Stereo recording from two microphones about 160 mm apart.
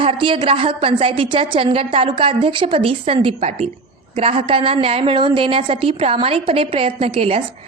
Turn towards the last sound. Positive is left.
turn(degrees=-35)  # may be behind; listen again after turning